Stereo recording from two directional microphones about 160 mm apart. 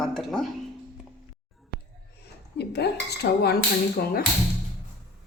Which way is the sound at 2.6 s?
90° left.